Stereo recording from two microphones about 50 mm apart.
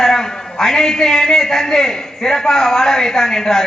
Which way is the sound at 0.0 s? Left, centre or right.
Centre.